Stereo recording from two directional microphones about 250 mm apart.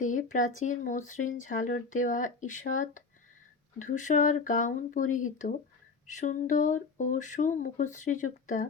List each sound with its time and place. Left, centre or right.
0.0 s speech: left